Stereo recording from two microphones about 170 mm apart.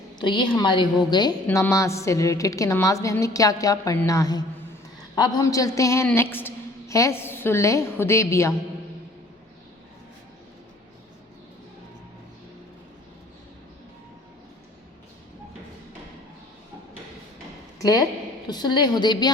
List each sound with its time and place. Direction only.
0.2 s a woman's voice: 25° left (ahead or behind)
1.5 s a woman's voice: 15° left (ahead or behind)
18.4 s a woman's voice: 25° left (ahead or behind)